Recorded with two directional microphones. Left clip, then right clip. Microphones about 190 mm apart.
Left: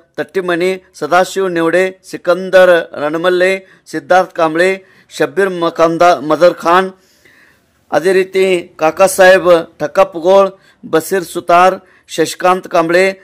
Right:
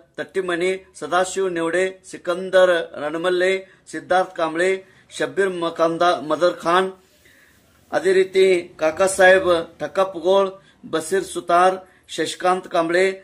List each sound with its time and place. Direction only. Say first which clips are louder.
0.1 s speech: left 8 dB; 50° left (ahead or behind)
7.9 s speech: left 6 dB; 55° left (ahead or behind)